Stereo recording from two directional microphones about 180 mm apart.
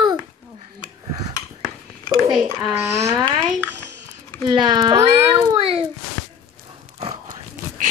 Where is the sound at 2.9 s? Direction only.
15° right (ahead or behind).